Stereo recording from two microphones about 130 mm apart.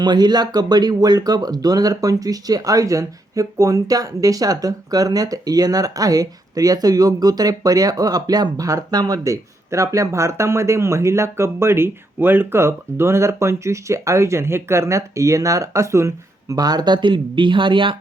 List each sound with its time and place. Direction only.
0.0 s speech: 35° right (ahead or behind)